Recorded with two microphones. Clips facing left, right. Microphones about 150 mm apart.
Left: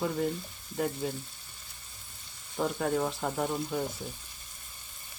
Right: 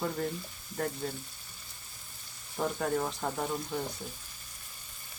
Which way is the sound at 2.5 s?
Centre (ahead or behind).